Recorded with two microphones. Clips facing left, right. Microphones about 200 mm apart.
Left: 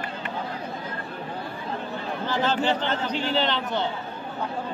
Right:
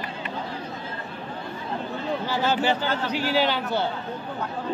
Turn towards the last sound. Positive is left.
turn(degrees=-10)  # may be behind; listen again after turning